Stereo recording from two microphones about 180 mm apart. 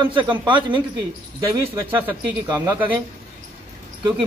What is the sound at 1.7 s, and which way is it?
Speech, 15° right (ahead or behind).